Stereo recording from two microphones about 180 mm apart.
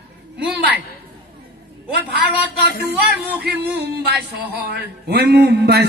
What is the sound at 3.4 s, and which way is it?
Speech, 65° right (ahead or behind).